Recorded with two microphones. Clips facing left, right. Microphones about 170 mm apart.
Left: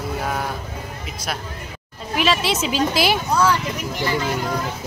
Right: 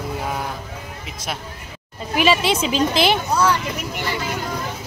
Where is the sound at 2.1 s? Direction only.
Centre (ahead or behind).